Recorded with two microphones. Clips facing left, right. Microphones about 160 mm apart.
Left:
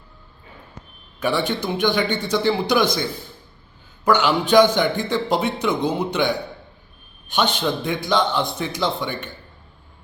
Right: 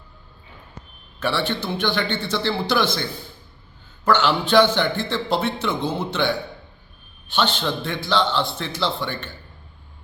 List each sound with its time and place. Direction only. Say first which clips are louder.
1.2 s a man's voice: left 2 dB; 15° left (ahead or behind)